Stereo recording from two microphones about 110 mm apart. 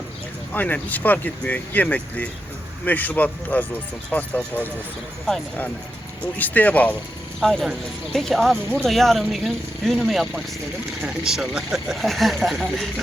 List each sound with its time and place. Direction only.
0.5 s speech: 15° left (ahead or behind)
6.3 s speech: 15° left (ahead or behind)
7.3 s speech: centre (ahead or behind)